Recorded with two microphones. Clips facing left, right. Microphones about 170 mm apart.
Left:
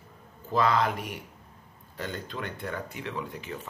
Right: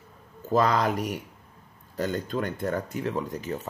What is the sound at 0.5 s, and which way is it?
Speech, 45° right (ahead or behind).